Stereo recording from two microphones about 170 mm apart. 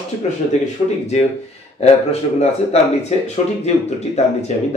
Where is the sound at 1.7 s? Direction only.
40° left (ahead or behind).